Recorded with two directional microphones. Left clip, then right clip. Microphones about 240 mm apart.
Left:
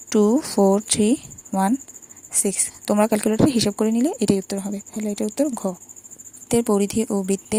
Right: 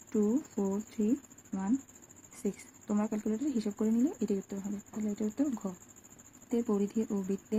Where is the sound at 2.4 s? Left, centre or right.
Left.